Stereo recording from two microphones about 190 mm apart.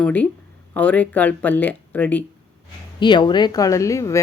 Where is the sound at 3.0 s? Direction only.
25° left (ahead or behind).